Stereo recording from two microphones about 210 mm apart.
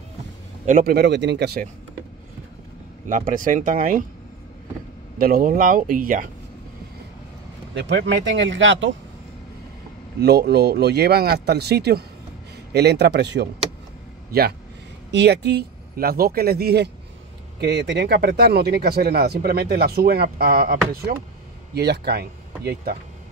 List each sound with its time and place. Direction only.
0.7 s speech: 45° right (ahead or behind)
3.1 s speech: 40° right (ahead or behind)
5.2 s speech: 45° right (ahead or behind)
7.8 s speech: 55° right (ahead or behind)
10.2 s speech: 50° right (ahead or behind)